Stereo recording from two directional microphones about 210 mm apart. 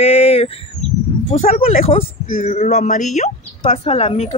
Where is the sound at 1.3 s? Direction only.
35° left (ahead or behind).